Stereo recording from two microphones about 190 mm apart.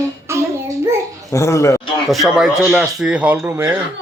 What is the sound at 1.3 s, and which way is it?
Speech, 15° left (ahead or behind).